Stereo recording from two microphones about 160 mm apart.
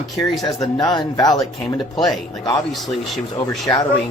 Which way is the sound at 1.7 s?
Centre (ahead or behind).